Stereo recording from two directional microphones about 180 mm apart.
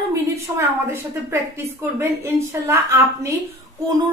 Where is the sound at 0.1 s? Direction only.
15° right (ahead or behind).